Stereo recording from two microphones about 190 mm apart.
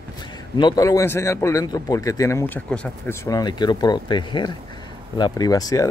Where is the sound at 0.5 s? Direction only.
20° left (ahead or behind).